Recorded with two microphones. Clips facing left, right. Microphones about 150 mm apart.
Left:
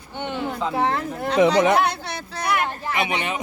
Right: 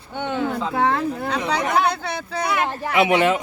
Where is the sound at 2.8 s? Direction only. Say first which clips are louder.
Right 8 dB; 90° right.